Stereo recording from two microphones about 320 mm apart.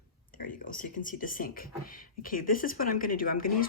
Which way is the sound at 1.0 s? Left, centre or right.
Left.